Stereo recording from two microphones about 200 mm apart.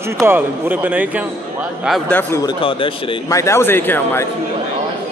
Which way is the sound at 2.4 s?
25° left (ahead or behind).